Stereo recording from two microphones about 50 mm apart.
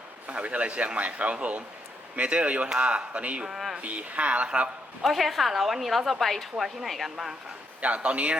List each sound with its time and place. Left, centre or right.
0.3 s a man's voice: right
3.4 s speech: centre
3.8 s a man's voice: right
5.0 s a woman's voice: centre
7.8 s a man's voice: right